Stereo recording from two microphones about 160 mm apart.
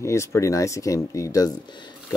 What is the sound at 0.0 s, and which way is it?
Speech, 15° left (ahead or behind).